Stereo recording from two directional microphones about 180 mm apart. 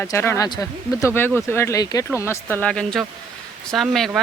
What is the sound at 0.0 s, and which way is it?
Speech, 15° left (ahead or behind).